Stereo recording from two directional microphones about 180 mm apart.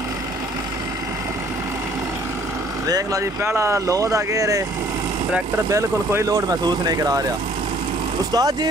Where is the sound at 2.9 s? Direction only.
20° right (ahead or behind).